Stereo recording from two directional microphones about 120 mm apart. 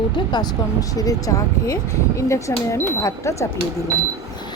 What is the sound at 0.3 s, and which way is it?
Speech, 35° left (ahead or behind).